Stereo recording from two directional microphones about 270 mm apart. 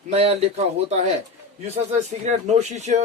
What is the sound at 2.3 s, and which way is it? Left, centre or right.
Speech, right.